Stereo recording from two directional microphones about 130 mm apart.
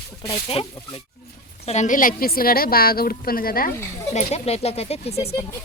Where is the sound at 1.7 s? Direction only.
70° left (ahead or behind).